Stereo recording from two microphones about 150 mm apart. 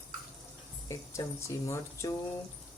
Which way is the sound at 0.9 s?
20° left (ahead or behind).